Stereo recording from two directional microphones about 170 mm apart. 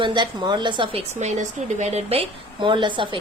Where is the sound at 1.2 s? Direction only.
45° right (ahead or behind).